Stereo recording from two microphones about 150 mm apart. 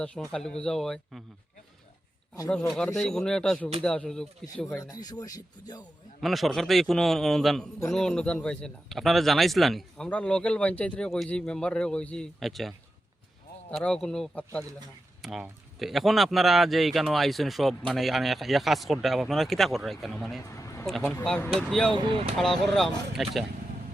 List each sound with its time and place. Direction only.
0.0 s speech: 5° left (ahead or behind)
2.5 s speech: 5° left (ahead or behind)
4.8 s speech: 25° left (ahead or behind)
6.1 s speech: centre (ahead or behind)
20.6 s a sound: 20° left (ahead or behind)
20.8 s speech: centre (ahead or behind)
21.9 s speech: 40° right (ahead or behind)
22.4 s speech: centre (ahead or behind)